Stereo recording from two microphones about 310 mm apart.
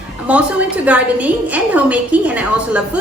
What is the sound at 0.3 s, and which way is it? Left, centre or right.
A woman's voice, centre.